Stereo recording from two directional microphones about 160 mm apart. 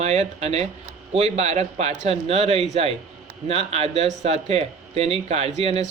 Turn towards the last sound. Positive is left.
turn(degrees=-40)  # may be behind; listen again after turning